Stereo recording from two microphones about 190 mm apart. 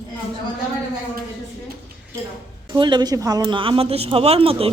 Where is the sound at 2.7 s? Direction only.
25° right (ahead or behind).